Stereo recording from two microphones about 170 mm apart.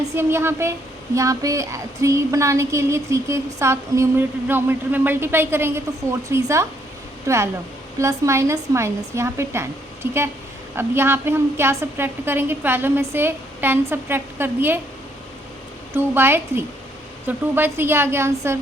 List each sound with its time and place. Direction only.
0.1 s speech: 15° right (ahead or behind)
15.9 s speech: 15° right (ahead or behind)